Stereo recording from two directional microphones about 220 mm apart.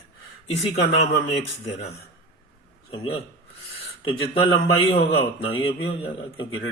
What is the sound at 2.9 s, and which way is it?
A man's voice, 25° left (ahead or behind).